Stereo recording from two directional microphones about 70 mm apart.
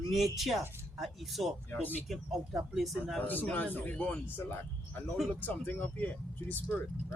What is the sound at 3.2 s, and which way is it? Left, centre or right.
Speech, left.